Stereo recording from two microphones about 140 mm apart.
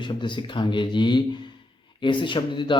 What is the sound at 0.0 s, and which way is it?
Speech, 35° left (ahead or behind).